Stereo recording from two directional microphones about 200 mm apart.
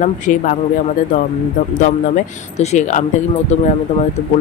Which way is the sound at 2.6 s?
35° left (ahead or behind).